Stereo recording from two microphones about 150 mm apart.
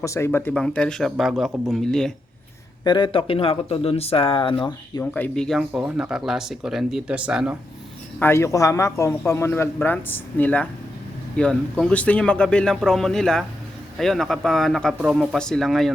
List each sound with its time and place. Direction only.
0.0 s speech: 20° left (ahead or behind); by 2.1 s 5° left (ahead or behind)
2.8 s speech: 30° left (ahead or behind)
5.1 s speech: 10° left (ahead or behind)
8.2 s speech: 20° left (ahead or behind); by 15.9 s centre (ahead or behind)